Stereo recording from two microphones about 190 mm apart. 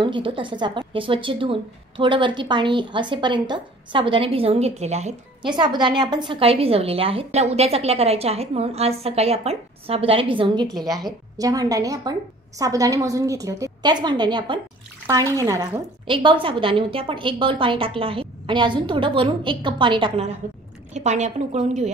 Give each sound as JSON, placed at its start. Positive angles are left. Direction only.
{"t": 0.0, "sound": "a woman's voice", "side_deg": -25}
{"t": 5.5, "sound": "a woman's voice", "side_deg": -25}
{"t": 16.1, "sound": "a woman's voice", "side_deg": -25}